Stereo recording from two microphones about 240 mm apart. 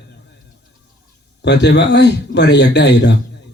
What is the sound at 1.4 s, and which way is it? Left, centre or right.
Speech, left.